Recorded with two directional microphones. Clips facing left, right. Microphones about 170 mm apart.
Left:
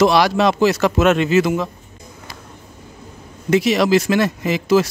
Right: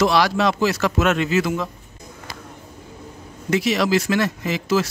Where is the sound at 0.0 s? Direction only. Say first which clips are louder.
Left 4 dB; 20° left (ahead or behind).